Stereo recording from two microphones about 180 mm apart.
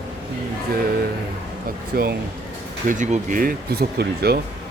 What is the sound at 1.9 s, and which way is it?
Speech, 55° right (ahead or behind).